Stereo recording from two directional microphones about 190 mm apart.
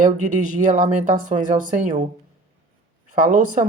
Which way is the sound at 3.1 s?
45° right (ahead or behind).